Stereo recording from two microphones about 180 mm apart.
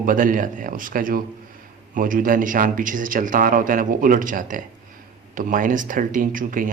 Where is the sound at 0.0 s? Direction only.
50° right (ahead or behind).